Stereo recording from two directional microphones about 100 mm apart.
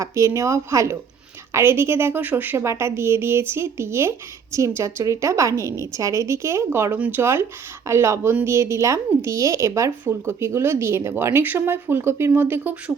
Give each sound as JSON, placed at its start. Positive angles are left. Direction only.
{"t": 0.0, "sound": "a woman's voice", "side_deg": -30}